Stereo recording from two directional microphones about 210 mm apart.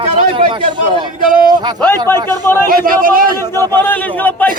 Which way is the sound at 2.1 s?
20° right (ahead or behind).